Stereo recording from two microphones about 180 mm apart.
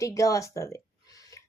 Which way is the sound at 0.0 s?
20° left (ahead or behind).